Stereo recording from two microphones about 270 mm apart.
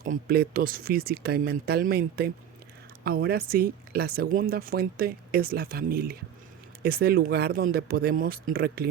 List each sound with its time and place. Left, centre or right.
0.0 s speech: right